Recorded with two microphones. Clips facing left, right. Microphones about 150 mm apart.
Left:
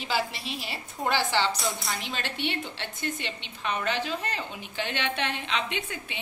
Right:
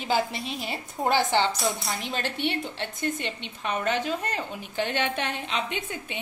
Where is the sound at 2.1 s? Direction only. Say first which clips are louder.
Right 5 dB; 45° right (ahead or behind).